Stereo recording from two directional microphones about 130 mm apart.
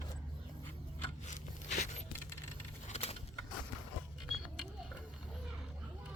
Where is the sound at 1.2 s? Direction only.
65° left (ahead or behind).